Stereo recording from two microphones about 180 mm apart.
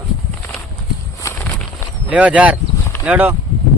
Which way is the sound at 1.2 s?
10° left (ahead or behind).